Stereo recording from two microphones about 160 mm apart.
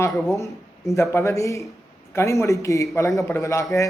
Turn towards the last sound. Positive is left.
turn(degrees=20)  # may be behind; listen again after turning